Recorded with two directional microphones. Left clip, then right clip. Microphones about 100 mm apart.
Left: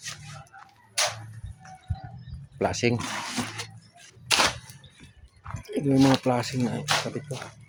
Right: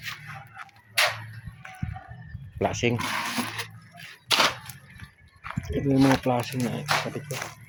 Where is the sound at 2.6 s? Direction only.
20° left (ahead or behind).